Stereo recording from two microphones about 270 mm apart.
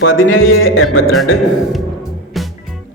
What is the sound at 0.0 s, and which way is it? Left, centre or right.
Speech, left.